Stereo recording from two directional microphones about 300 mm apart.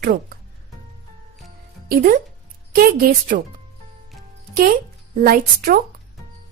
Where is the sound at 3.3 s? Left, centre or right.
Right.